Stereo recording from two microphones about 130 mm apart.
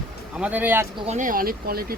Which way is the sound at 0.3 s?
10° right (ahead or behind).